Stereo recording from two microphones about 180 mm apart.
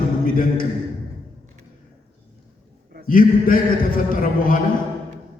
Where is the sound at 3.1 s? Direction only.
50° left (ahead or behind).